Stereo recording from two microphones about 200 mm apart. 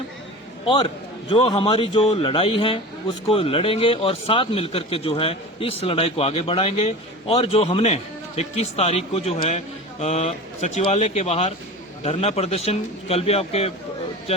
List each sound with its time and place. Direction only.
1.3 s a man's voice: 25° left (ahead or behind)